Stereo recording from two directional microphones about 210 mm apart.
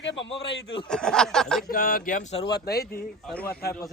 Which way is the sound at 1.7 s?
45° left (ahead or behind).